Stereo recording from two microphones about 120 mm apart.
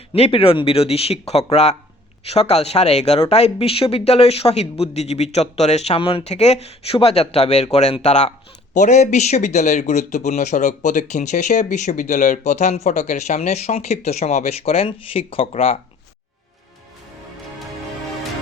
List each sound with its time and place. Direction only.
0.1 s speech: 50° left (ahead or behind); by 8.3 s 75° left (ahead or behind)
8.7 s speech: 85° left; by 15.8 s 55° left (ahead or behind)